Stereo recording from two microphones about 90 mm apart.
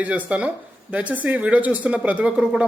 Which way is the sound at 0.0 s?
15° right (ahead or behind).